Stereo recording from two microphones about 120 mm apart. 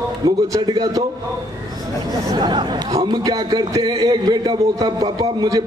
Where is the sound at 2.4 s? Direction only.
40° right (ahead or behind).